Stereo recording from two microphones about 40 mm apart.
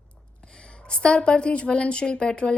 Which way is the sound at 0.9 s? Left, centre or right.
Left.